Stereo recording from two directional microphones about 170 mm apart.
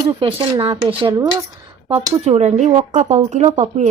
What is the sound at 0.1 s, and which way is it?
Speech, 30° right (ahead or behind).